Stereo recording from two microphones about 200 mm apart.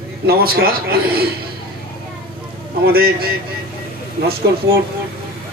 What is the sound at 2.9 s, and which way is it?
Speech, 50° right (ahead or behind).